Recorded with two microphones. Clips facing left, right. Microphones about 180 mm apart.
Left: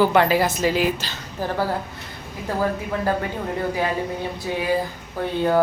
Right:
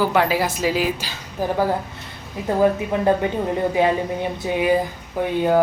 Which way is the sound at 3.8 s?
20° right (ahead or behind).